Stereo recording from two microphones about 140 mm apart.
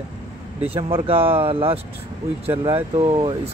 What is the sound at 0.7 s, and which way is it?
Speech, 40° right (ahead or behind).